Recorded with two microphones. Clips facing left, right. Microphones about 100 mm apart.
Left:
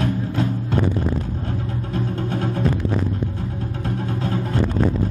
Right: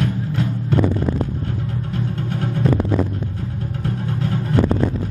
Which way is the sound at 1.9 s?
30° left (ahead or behind).